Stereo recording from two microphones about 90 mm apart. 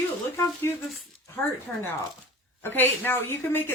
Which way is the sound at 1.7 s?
20° left (ahead or behind).